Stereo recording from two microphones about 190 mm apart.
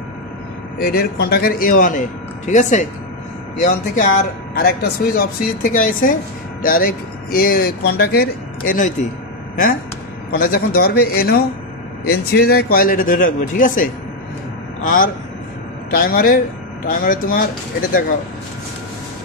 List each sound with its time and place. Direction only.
0.7 s speech: 55° left (ahead or behind)
4.6 s speech: 50° left (ahead or behind)
10.3 s a man's voice: 50° left (ahead or behind)